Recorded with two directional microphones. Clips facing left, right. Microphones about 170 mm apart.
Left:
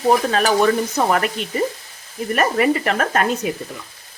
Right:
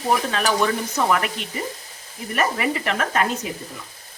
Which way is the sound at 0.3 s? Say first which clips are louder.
Left 5 dB; 40° left (ahead or behind).